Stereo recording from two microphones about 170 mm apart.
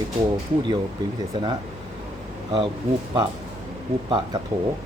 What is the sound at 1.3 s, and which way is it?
Speech, 30° right (ahead or behind).